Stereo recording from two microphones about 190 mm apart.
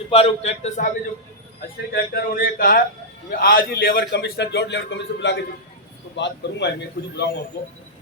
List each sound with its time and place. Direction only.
0.1 s a man's voice: 30° left (ahead or behind)
1.9 s a man's voice: 50° left (ahead or behind)